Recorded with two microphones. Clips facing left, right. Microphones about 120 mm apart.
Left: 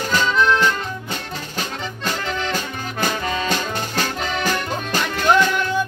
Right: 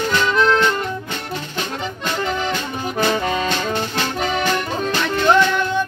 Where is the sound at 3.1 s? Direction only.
15° right (ahead or behind).